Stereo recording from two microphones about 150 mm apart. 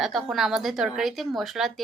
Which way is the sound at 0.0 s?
Centre (ahead or behind).